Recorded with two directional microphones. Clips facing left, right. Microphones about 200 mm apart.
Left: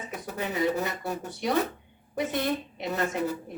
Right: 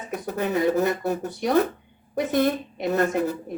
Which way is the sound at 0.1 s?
55° right (ahead or behind).